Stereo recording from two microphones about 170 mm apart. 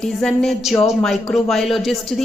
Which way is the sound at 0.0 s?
Centre (ahead or behind).